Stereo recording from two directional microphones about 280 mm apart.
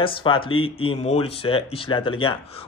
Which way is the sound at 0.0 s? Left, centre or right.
Centre.